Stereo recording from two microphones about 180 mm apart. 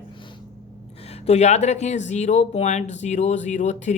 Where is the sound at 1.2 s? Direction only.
40° left (ahead or behind).